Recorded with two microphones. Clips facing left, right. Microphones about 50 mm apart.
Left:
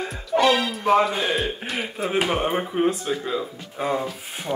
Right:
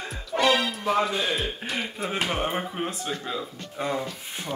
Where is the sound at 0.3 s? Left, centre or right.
Centre.